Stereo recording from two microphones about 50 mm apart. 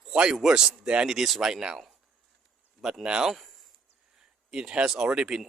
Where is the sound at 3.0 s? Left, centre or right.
Centre.